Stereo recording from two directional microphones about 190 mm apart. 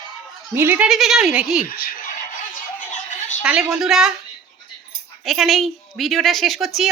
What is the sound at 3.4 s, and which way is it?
Speech, 5° right (ahead or behind).